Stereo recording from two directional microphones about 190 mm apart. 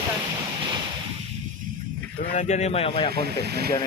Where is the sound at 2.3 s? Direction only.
35° left (ahead or behind).